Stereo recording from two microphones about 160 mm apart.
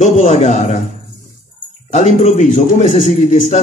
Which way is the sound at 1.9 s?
50° left (ahead or behind).